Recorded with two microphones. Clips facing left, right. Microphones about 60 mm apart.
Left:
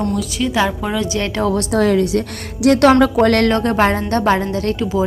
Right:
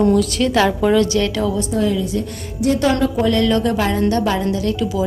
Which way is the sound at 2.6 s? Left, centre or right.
Left.